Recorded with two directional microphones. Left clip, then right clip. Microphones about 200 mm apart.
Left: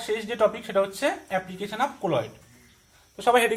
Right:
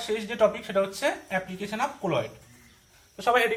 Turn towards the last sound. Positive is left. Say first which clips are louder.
# left 2 dB
turn(degrees=45)  # may be behind; listen again after turning